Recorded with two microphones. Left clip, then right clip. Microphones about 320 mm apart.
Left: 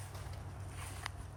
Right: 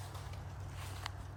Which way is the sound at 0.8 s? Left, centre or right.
Centre.